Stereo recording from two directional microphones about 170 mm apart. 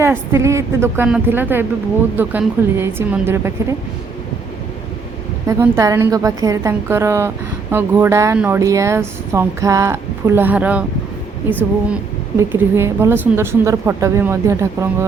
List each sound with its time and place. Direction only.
0.0 s speech: 15° right (ahead or behind)
5.5 s speech: 15° right (ahead or behind)
12.4 s speech: 15° right (ahead or behind)